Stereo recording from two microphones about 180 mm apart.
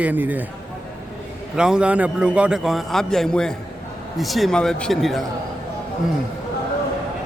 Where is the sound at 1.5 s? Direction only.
5° right (ahead or behind).